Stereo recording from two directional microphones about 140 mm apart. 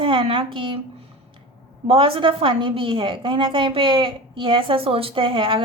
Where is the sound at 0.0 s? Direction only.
40° right (ahead or behind).